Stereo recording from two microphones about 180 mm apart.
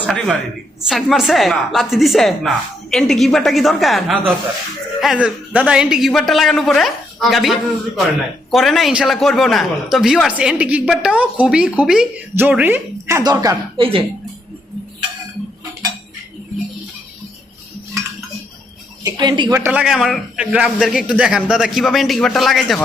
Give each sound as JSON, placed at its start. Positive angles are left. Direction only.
{"t": 0.0, "sound": "a man's voice", "side_deg": 0}
{"t": 19.0, "sound": "a man's voice", "side_deg": -25}